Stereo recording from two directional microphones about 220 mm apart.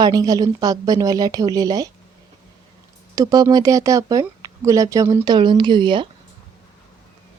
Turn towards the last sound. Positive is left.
turn(degrees=-20)  # may be behind; listen again after turning